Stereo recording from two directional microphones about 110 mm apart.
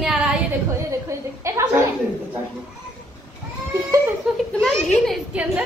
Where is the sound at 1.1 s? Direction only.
25° right (ahead or behind).